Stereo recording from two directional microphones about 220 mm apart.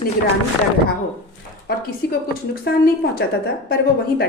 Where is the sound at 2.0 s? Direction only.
45° left (ahead or behind).